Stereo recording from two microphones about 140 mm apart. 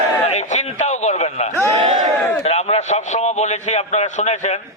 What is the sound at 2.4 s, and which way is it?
A man's voice, 50° left (ahead or behind).